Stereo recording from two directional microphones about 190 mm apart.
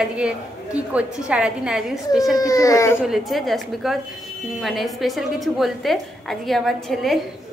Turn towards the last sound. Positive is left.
turn(degrees=0)  # may be behind; listen again after turning